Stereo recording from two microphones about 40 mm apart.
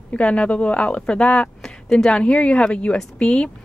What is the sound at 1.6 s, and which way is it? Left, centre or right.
Speech, centre.